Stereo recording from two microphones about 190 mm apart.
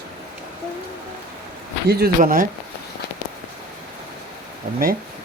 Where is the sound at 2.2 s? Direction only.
45° right (ahead or behind).